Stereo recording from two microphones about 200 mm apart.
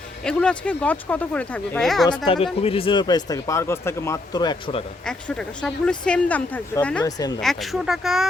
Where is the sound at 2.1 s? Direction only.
25° left (ahead or behind).